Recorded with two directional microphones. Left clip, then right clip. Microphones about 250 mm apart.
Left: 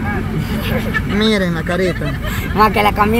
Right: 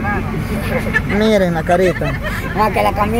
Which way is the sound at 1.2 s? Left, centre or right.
Centre.